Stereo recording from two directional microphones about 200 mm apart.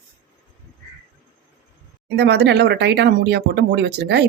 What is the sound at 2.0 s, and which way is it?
Speech, 55° right (ahead or behind).